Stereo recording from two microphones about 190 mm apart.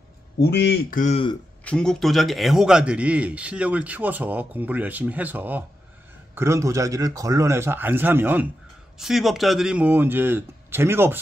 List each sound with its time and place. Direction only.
0.4 s speech: 65° left (ahead or behind)
0.9 s a man's voice: 40° left (ahead or behind)
1.6 s a man's voice: 5° left (ahead or behind); by 11.1 s 10° right (ahead or behind)